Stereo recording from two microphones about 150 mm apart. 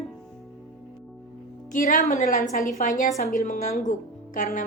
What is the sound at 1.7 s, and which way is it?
Speech, 60° left (ahead or behind).